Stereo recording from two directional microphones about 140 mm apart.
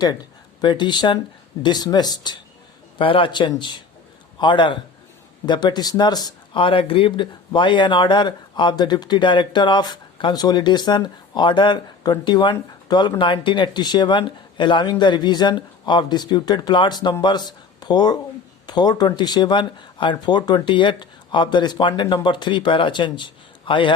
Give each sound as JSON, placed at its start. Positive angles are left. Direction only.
{"t": 0.0, "sound": "a man's voice", "side_deg": 30}